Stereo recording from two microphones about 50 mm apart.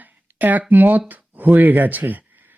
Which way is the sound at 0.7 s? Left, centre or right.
Right.